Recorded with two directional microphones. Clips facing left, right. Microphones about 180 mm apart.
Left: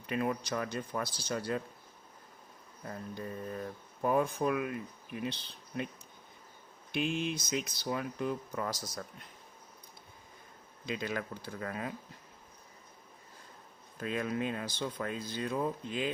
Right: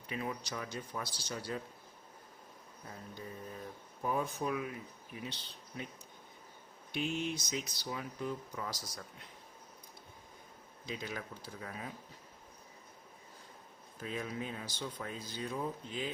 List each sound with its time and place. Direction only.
0.1 s speech: 55° left (ahead or behind)
2.9 s speech: 60° left (ahead or behind)
7.2 s speech: 70° left (ahead or behind); by 9.0 s 50° left (ahead or behind)
10.8 s speech: 75° left (ahead or behind)
14.0 s speech: 65° left (ahead or behind)